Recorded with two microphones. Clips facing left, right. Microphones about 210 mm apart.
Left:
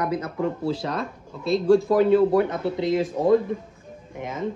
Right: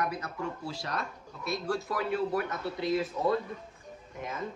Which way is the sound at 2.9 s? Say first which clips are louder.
Left 5 dB; 90° left.